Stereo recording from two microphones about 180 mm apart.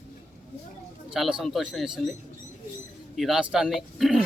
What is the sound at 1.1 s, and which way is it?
Speech, centre (ahead or behind).